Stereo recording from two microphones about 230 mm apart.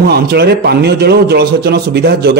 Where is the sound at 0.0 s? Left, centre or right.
Right.